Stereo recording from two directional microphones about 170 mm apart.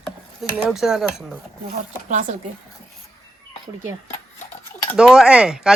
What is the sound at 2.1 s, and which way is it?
Speech, 45° right (ahead or behind).